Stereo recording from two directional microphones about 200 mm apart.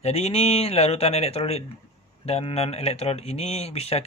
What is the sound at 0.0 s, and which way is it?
Speech, 30° left (ahead or behind).